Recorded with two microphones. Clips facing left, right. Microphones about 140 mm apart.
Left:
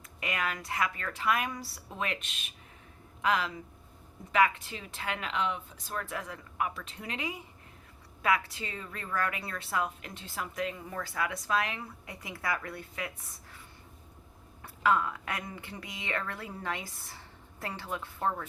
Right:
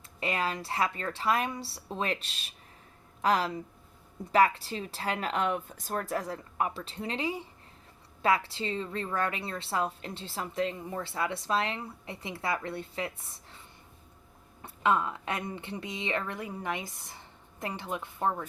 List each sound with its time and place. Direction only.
0.2 s a woman's voice: 30° right (ahead or behind)
14.6 s a woman's voice: 25° right (ahead or behind)